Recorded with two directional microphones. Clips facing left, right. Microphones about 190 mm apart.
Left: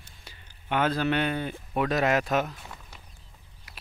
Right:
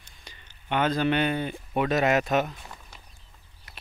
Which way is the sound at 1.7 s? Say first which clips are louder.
Right 1 dB; centre (ahead or behind).